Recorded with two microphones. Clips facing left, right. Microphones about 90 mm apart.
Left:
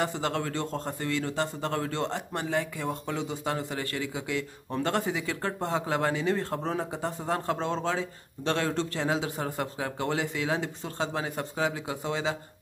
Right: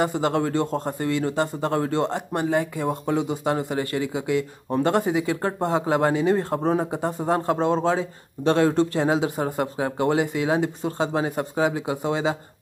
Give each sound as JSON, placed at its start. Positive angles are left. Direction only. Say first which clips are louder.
{"t": 0.0, "sound": "a man's voice", "louder": "right 7 dB", "side_deg": -15}